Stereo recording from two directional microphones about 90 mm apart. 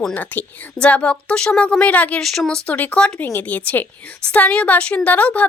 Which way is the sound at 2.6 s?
15° left (ahead or behind).